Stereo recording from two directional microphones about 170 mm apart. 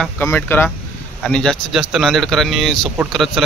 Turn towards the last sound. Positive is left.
turn(degrees=0)  # may be behind; listen again after turning